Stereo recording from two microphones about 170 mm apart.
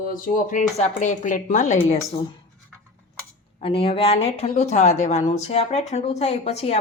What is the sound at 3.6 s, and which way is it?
Speech, 35° left (ahead or behind).